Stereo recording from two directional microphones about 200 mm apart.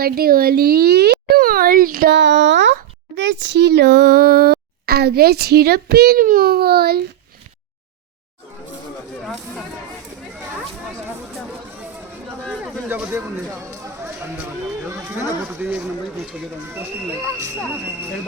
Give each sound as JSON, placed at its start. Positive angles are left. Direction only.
{"t": 0.0, "sound": "speech", "side_deg": -50}
{"t": 12.5, "sound": "speech", "side_deg": -5}
{"t": 14.8, "sound": "speech", "side_deg": -10}